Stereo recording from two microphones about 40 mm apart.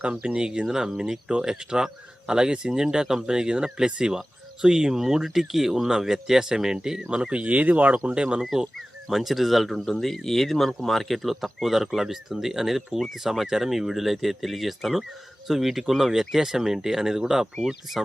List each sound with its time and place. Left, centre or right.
0.0 s speech: right; by 7.1 s centre
7.1 s speech: right
7.4 s speech: right
8.0 s speech: right
9.0 s speech: centre